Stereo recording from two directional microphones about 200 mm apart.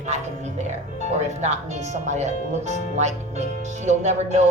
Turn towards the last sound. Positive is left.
turn(degrees=-35)  # may be behind; listen again after turning